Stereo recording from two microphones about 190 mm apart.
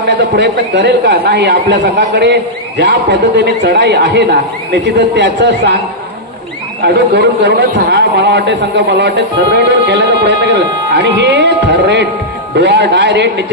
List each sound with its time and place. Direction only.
0.4 s a man's voice: 65° right (ahead or behind)
6.8 s a man's voice: 65° right (ahead or behind)